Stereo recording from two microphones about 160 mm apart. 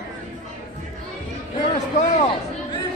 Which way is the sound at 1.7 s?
45° left (ahead or behind).